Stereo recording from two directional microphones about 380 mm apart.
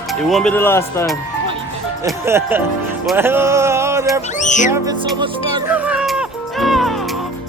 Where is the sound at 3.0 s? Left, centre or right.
Centre.